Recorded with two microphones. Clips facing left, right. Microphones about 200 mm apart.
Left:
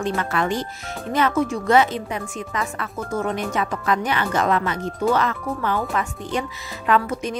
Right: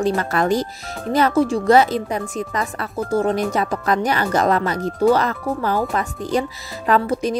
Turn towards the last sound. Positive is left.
turn(degrees=-35)  # may be behind; listen again after turning